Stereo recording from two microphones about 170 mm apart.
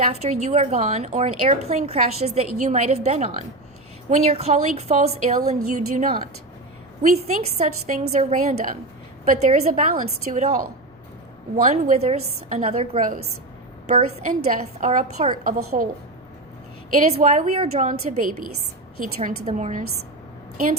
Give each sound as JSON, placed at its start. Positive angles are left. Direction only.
{"t": 0.1, "sound": "a woman's voice", "side_deg": -40}
{"t": 7.6, "sound": "a woman's voice", "side_deg": -50}
{"t": 15.4, "sound": "a woman's voice", "side_deg": -60}
{"t": 16.9, "sound": "a woman's voice", "side_deg": -45}